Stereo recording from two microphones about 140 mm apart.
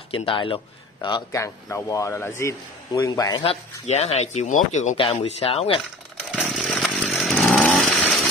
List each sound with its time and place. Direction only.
0.1 s speech: 40° left (ahead or behind)
1.3 s a man's voice: 20° left (ahead or behind)
3.4 s speech: 50° left (ahead or behind)
4.9 s speech: 40° left (ahead or behind)
6.3 s chainsaw: centre (ahead or behind)